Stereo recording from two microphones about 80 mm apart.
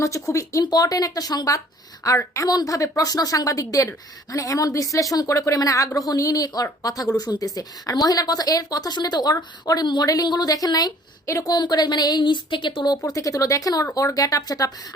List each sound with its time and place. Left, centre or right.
0.0 s speech: left
0.6 s a woman's voice: left
2.0 s a woman's voice: left
9.3 s a woman's voice: left
9.8 s a woman's voice: left
10.1 s a woman's voice: left
11.3 s speech: left
11.5 s speech: left
12.2 s speech: left
13.0 s a woman's voice: left